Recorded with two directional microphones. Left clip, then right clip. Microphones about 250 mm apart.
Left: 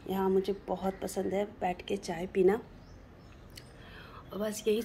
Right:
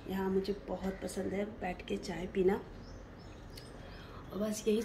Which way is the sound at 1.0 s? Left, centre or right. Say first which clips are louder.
Left 5 dB; centre.